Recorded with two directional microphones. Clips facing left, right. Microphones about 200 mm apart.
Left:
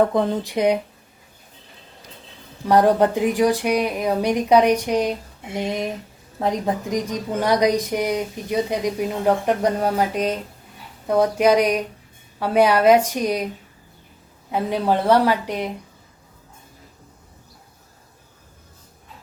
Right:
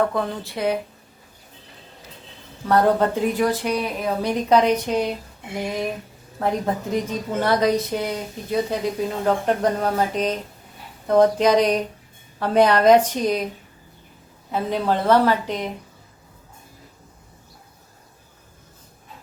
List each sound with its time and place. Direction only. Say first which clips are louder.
0.0 s speech: left 4 dB; 20° left (ahead or behind)
2.6 s a woman's voice: left 2 dB; 15° left (ahead or behind)
14.5 s a woman's voice: left 2 dB; 15° left (ahead or behind)